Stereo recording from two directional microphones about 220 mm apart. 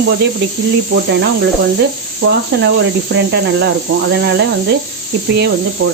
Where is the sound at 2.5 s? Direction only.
45° right (ahead or behind).